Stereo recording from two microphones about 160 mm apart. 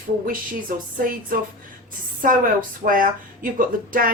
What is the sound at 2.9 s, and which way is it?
Speech, 55° right (ahead or behind).